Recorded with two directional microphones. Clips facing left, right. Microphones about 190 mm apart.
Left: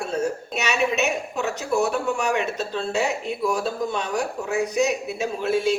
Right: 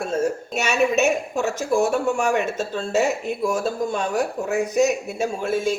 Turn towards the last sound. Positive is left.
turn(degrees=-50)  # may be behind; listen again after turning